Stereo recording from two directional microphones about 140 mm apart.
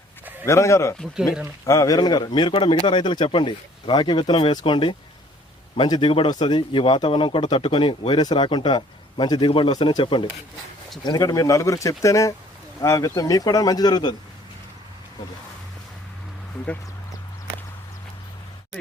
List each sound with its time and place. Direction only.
0.4 s a man's voice: 20° left (ahead or behind)